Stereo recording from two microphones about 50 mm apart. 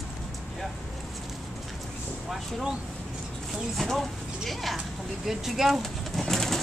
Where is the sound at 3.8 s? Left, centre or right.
Centre.